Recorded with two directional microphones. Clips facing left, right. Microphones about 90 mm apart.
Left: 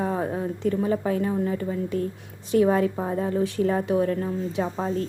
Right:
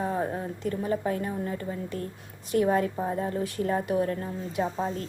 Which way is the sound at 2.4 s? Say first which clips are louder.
Left 4 dB; 20° left (ahead or behind).